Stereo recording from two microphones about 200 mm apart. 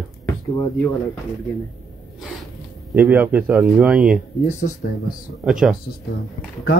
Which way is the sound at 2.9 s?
5° right (ahead or behind).